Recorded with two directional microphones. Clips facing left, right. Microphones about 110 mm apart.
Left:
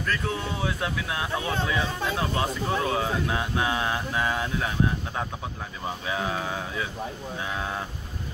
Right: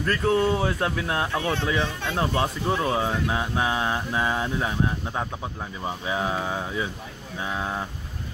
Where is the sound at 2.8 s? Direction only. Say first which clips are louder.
Right 2 dB; 20° right (ahead or behind).